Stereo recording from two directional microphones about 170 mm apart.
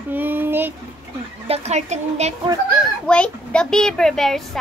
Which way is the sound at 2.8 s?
5° left (ahead or behind).